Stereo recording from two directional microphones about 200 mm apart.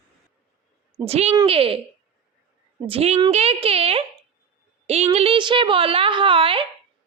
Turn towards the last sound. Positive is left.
turn(degrees=-25)  # may be behind; listen again after turning